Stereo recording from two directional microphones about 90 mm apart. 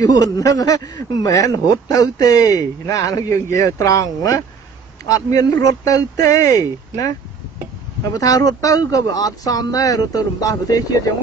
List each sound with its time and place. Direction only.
0.0 s speech: 45° left (ahead or behind)
8.1 s speech: 45° left (ahead or behind)